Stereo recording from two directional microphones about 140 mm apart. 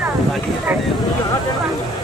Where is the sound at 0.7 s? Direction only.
10° right (ahead or behind).